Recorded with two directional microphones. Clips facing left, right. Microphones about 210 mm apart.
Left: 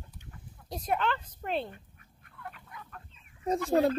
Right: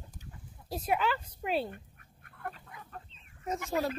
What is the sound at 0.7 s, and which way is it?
A woman's voice, 5° right (ahead or behind).